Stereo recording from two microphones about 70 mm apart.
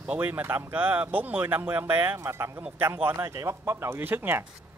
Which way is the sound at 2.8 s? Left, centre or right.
Right.